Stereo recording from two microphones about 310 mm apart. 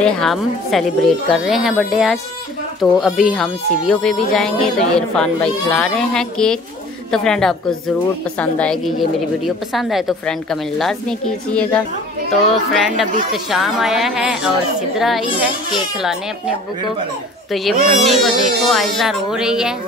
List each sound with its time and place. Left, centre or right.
0.0 s speech: centre
17.8 s speech: right
18.2 s speech: centre